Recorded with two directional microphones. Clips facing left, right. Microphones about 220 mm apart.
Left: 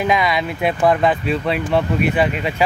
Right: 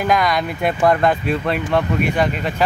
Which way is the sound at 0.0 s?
Centre (ahead or behind).